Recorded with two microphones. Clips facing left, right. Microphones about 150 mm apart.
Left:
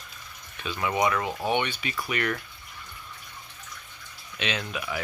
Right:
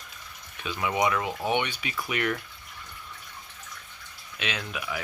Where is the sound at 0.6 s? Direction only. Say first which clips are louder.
Left 1 dB; 10° right (ahead or behind).